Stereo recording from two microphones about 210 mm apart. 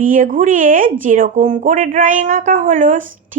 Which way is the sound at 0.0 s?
40° right (ahead or behind).